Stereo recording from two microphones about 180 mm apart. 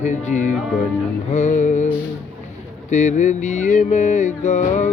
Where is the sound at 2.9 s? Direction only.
40° left (ahead or behind).